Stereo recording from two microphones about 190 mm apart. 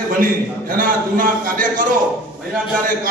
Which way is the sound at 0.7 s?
45° right (ahead or behind).